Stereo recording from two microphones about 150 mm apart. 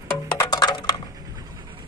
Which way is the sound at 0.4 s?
25° left (ahead or behind).